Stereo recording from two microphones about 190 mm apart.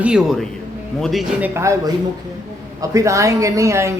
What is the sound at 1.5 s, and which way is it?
Speech, 15° right (ahead or behind).